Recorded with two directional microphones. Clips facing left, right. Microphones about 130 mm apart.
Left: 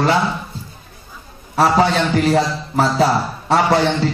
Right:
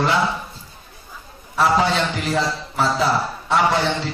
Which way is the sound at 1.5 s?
40° left (ahead or behind).